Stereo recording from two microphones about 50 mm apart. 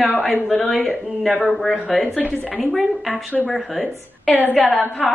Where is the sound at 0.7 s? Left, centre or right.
Centre.